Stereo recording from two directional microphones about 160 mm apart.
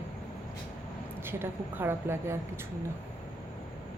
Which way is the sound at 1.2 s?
15° right (ahead or behind).